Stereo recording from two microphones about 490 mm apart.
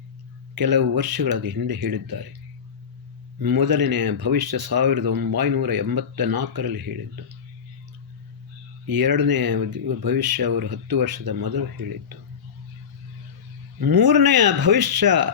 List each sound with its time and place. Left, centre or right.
0.5 s speech: right
3.3 s speech: right
8.9 s speech: right
13.8 s speech: right